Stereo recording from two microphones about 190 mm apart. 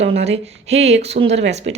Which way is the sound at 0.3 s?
35° right (ahead or behind).